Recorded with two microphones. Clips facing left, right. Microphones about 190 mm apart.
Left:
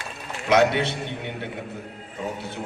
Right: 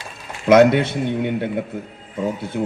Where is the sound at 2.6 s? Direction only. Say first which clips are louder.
Right 11 dB; 55° right (ahead or behind).